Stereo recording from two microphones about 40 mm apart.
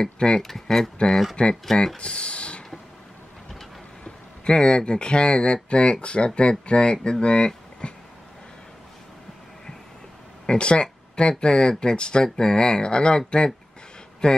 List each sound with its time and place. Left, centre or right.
0.0 s speech: centre
0.4 s speech: centre
1.3 s speech: left
1.7 s speech: centre
2.0 s speech: left
4.0 s speech: left
10.4 s speech: left
14.2 s speech: centre